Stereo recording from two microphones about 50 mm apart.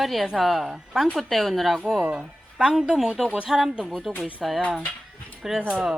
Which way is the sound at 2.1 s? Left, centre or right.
Centre.